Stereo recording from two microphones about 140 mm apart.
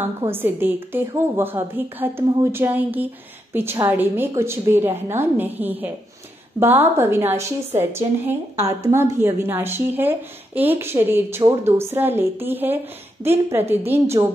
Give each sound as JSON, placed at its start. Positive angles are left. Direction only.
{"t": 0.3, "sound": "speech", "side_deg": -15}